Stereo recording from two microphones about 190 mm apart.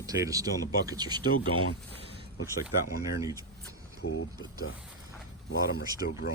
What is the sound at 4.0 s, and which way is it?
Speech, 90° left.